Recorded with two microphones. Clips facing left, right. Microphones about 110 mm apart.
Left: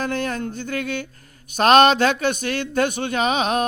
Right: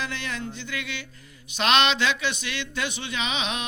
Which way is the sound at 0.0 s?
45° left (ahead or behind).